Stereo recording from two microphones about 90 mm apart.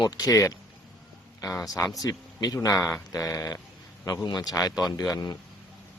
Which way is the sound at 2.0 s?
45° left (ahead or behind).